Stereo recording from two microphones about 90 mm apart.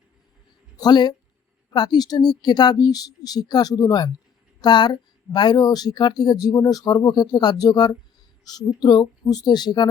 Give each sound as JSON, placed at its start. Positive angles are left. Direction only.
{"t": 0.8, "sound": "speech", "side_deg": 55}